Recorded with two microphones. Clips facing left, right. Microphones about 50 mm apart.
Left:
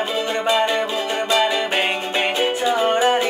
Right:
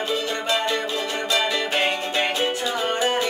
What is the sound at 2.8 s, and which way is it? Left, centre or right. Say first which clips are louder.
Music: left 5 dB; left.